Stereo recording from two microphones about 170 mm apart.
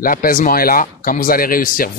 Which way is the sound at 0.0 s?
55° left (ahead or behind).